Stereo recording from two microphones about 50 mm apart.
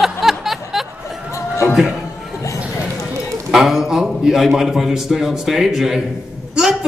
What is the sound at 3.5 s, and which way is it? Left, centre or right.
A man's voice, centre.